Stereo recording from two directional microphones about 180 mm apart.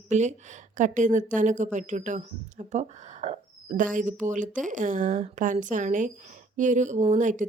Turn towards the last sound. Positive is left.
turn(degrees=-45)  # may be behind; listen again after turning